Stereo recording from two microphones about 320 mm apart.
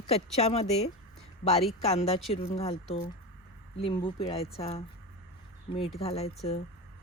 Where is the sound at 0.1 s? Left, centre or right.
Centre.